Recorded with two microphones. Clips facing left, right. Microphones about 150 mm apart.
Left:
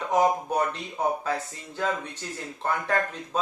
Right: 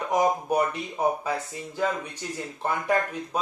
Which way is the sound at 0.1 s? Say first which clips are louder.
Even; 10° right (ahead or behind).